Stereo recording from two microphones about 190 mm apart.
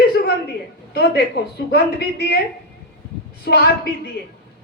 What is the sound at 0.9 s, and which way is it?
A woman's voice, 55° left (ahead or behind).